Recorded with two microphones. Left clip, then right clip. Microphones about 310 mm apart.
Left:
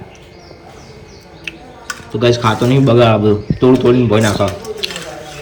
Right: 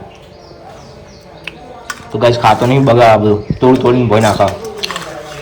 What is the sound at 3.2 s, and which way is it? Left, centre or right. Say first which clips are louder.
Speech: right 1 dB; centre.